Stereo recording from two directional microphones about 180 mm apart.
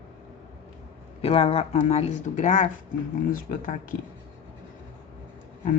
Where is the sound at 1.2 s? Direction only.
30° left (ahead or behind); by 4.0 s 50° left (ahead or behind).